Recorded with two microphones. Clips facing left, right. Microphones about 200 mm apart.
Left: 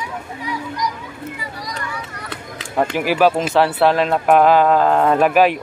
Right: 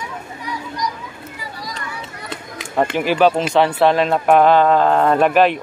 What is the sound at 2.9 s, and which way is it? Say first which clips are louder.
Speech: even; 10° left (ahead or behind).